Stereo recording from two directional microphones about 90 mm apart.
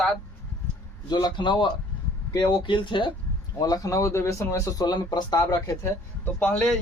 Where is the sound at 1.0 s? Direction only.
50° left (ahead or behind).